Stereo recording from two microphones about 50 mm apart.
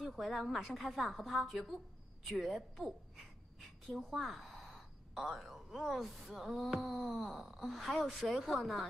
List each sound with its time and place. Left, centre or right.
0.0 s speech: centre
4.1 s speech: centre